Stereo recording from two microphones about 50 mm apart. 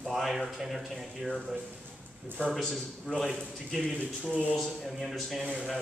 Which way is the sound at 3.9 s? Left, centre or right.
Right.